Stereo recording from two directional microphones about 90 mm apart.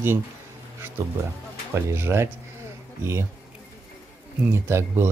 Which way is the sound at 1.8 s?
25° right (ahead or behind).